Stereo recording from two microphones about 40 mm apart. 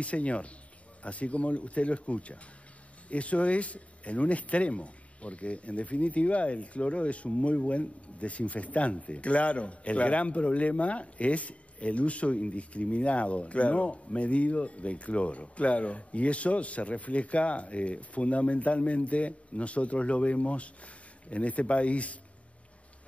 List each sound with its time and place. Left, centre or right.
0.0 s speech: left